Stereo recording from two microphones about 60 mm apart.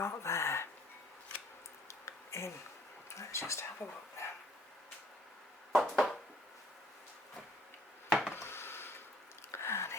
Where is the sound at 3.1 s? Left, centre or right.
Left.